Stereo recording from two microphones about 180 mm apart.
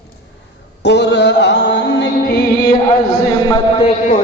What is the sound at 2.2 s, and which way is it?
Music, 50° left (ahead or behind).